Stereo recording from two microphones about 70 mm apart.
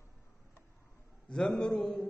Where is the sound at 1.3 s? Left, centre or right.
Centre.